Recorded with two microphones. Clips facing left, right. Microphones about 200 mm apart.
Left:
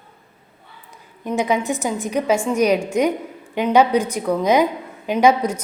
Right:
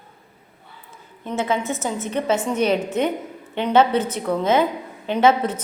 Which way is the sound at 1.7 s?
15° left (ahead or behind).